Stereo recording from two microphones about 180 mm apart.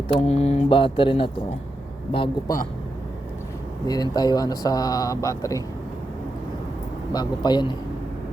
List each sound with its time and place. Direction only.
0.1 s speech: 30° left (ahead or behind)
3.8 s speech: 20° left (ahead or behind)
7.1 s speech: 25° left (ahead or behind)